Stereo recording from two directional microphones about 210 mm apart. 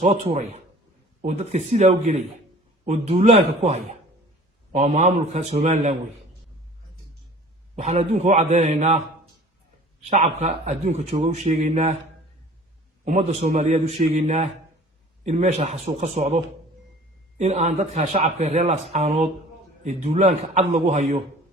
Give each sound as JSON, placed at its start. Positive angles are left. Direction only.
{"t": 0.0, "sound": "speech", "side_deg": -30}
{"t": 7.8, "sound": "speech", "side_deg": -35}
{"t": 10.0, "sound": "speech", "side_deg": -35}
{"t": 13.4, "sound": "speech", "side_deg": -35}